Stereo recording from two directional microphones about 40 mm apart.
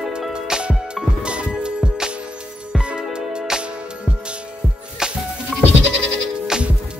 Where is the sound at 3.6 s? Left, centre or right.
Right.